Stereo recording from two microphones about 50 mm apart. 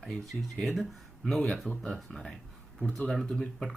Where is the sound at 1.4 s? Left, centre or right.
Centre.